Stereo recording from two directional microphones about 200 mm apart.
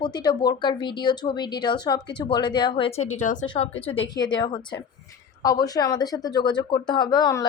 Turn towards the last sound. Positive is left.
turn(degrees=20)  # may be behind; listen again after turning